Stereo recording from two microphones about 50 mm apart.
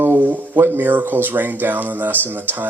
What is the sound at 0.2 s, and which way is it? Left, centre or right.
Speech, right.